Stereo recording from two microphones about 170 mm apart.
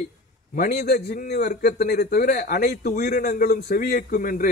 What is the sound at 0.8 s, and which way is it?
A man's voice, 75° left (ahead or behind).